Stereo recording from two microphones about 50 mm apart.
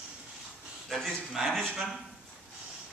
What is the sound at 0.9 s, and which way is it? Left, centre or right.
Speech, centre.